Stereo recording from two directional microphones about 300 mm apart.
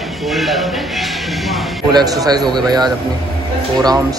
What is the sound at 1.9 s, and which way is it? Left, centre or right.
Speech, centre.